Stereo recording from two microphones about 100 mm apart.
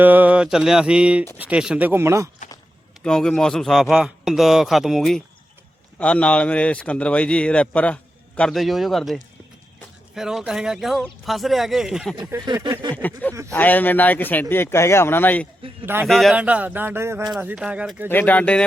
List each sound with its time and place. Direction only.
0.0 s mantra: 15° right (ahead or behind)
1.4 s speech: 10° right (ahead or behind)
1.9 s music: 25° right (ahead or behind)
3.0 s speech: 5° left (ahead or behind)
6.0 s a man's voice: 10° left (ahead or behind)
8.4 s speech: 5° left (ahead or behind)
13.0 s a man's voice: 15° left (ahead or behind)
16.0 s speech: centre (ahead or behind)
16.3 s music: 15° right (ahead or behind)
17.4 s speech: 10° right (ahead or behind)
18.1 s a man's voice: 20° left (ahead or behind)